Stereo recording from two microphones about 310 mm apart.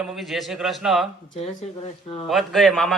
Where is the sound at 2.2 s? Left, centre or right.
Centre.